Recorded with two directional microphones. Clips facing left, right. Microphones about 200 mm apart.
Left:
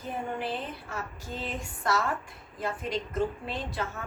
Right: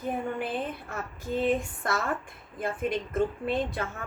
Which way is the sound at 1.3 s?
55° right (ahead or behind).